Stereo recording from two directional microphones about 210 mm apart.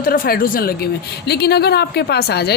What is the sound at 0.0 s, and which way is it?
A woman's voice, 45° left (ahead or behind).